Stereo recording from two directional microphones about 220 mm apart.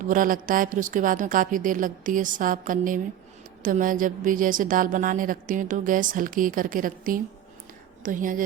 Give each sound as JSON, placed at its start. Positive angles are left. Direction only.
{"t": 0.0, "sound": "a woman's voice", "side_deg": -35}